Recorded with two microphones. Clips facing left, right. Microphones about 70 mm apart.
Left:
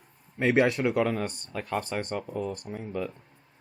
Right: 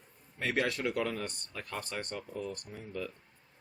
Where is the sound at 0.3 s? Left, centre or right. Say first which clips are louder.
Left 9 dB; left.